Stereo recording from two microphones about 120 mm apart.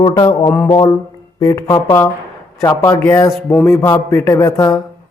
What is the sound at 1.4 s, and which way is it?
Speech, 30° left (ahead or behind).